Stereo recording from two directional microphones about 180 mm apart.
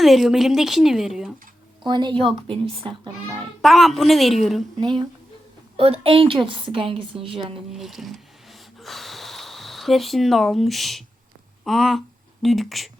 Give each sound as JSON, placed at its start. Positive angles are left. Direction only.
{"t": 0.0, "sound": "a woman's voice", "side_deg": 0}
{"t": 1.8, "sound": "a woman's voice", "side_deg": -25}
{"t": 3.6, "sound": "a woman's voice", "side_deg": 0}
{"t": 4.8, "sound": "a woman's voice", "side_deg": -25}
{"t": 7.7, "sound": "a woman's voice", "side_deg": 0}